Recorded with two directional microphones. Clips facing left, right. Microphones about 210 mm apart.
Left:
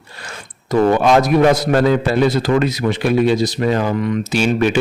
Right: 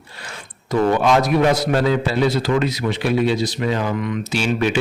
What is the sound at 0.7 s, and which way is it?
A man's voice, 45° left (ahead or behind).